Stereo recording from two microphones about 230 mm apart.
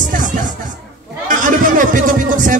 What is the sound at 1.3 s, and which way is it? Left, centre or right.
Chatter, right.